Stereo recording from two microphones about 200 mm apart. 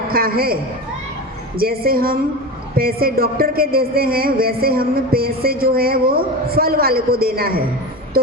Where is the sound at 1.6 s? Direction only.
50° right (ahead or behind).